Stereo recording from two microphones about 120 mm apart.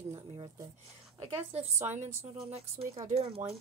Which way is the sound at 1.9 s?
60° right (ahead or behind).